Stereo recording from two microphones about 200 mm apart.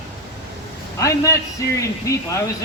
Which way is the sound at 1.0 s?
15° left (ahead or behind).